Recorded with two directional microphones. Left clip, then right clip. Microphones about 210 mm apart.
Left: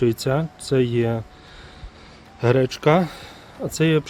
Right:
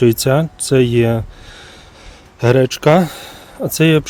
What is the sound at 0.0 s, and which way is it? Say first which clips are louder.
Speech: right 8 dB; 50° right (ahead or behind).